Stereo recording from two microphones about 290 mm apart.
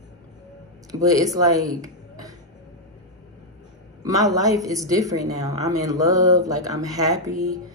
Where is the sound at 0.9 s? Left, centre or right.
Centre.